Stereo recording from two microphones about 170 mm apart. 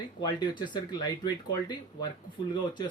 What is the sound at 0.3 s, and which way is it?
Speech, 25° left (ahead or behind).